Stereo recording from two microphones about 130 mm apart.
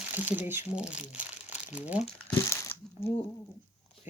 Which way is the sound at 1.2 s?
10° right (ahead or behind).